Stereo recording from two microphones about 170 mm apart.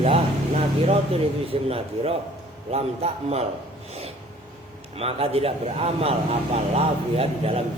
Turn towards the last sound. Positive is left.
turn(degrees=-35)  # may be behind; listen again after turning